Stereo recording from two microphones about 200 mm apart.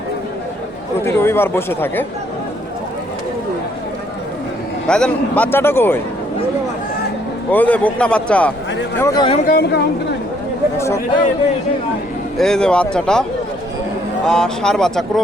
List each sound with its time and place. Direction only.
1.0 s a man's voice: 10° left (ahead or behind)
4.9 s a man's voice: 5° left (ahead or behind)
7.5 s a man's voice: 10° left (ahead or behind)
9.0 s speech: 15° left (ahead or behind)
9.5 s speech: 50° left (ahead or behind)
10.8 s a man's voice: 15° left (ahead or behind)
12.4 s speech: 5° left (ahead or behind)
14.3 s speech: 5° left (ahead or behind)